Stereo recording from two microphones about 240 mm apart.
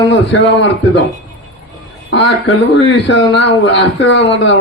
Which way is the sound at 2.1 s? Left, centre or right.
Left.